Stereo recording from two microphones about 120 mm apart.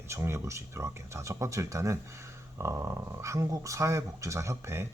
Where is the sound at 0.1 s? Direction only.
20° right (ahead or behind).